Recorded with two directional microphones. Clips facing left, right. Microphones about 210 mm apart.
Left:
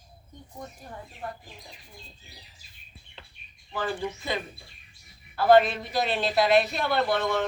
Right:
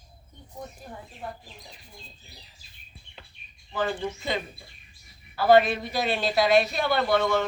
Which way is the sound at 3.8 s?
20° right (ahead or behind).